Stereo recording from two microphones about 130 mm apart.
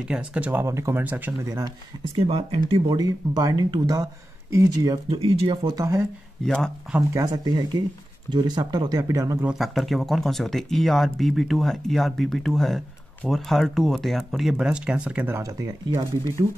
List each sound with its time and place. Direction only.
0.1 s speech: 10° right (ahead or behind)
2.1 s speech: 45° right (ahead or behind)
3.0 s speech: 25° right (ahead or behind)
4.9 s speech: 45° right (ahead or behind)
5.6 s speech: 30° right (ahead or behind)
6.4 s speech: 5° left (ahead or behind)
7.0 s speech: 20° right (ahead or behind)
9.5 s speech: centre (ahead or behind)
15.3 s speech: 25° right (ahead or behind)